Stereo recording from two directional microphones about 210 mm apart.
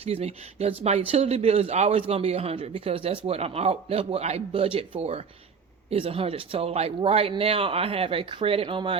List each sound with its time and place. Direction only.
0.0 s a man's voice: 30° right (ahead or behind)